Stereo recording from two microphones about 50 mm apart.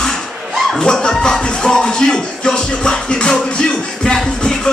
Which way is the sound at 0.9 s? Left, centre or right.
Centre.